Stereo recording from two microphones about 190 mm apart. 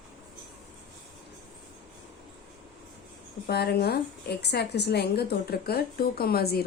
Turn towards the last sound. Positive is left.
turn(degrees=55)  # may be behind; listen again after turning